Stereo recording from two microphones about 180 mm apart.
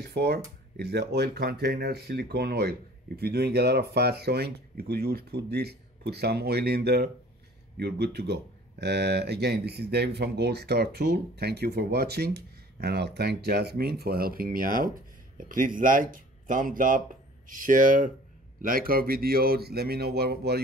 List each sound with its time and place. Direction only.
0.0 s speech: 65° right (ahead or behind)